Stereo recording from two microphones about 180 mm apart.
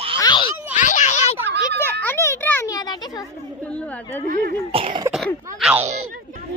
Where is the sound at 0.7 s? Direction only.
45° left (ahead or behind).